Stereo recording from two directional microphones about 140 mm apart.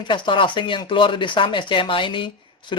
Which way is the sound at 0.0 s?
35° left (ahead or behind).